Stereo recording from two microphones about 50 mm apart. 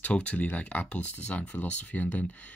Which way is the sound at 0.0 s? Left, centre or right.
Left.